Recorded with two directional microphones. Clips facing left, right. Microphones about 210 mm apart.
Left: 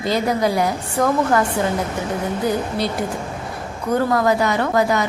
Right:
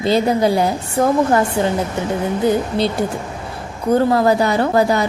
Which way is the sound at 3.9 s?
30° right (ahead or behind).